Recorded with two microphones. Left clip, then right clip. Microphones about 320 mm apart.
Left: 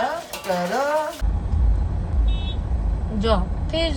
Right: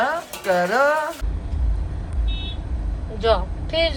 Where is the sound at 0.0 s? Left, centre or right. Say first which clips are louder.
Right 3 dB; centre.